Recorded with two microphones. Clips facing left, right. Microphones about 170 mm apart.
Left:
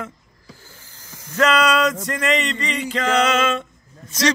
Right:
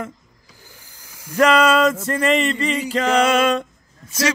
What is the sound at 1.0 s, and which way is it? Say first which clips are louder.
Snake: right 3 dB; 10° right (ahead or behind).